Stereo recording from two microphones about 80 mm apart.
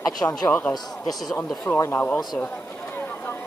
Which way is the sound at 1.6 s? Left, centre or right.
Left.